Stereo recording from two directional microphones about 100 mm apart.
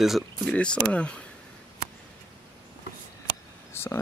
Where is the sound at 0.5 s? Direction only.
10° left (ahead or behind).